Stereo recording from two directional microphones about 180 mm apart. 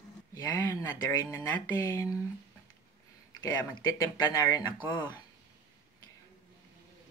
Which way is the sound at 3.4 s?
20° left (ahead or behind).